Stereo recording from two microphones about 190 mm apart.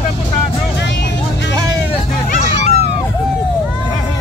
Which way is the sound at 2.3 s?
40° left (ahead or behind).